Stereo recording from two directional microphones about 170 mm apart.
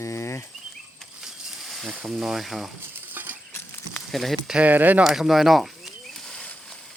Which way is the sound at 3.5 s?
15° left (ahead or behind).